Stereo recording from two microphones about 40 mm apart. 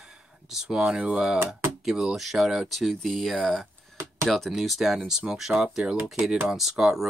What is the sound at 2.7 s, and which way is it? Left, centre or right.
Speech, centre.